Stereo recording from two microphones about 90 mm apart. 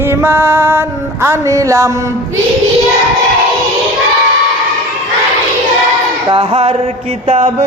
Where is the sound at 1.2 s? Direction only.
35° right (ahead or behind).